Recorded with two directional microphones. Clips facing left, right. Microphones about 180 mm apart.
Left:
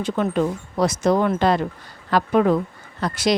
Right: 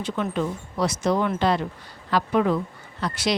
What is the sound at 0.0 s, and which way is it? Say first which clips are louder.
Speech: left 5 dB; 45° left (ahead or behind).